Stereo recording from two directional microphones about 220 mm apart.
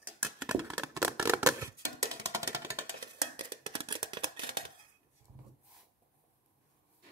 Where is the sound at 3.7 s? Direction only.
20° right (ahead or behind).